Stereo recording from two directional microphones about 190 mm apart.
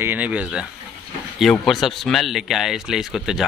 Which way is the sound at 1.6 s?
Centre (ahead or behind).